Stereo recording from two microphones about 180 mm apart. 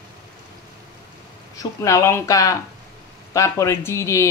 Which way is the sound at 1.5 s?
20° left (ahead or behind).